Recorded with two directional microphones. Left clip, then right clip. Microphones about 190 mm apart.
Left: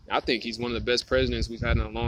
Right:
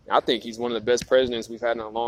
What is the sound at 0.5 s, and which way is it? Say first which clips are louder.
Speech: right 4 dB; 45° left (ahead or behind).